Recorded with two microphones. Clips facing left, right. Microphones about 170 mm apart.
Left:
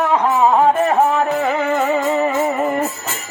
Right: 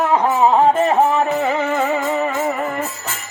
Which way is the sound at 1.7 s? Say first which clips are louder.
Left 2 dB; 15° left (ahead or behind).